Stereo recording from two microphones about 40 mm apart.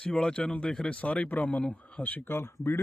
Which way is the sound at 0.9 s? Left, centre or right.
Left.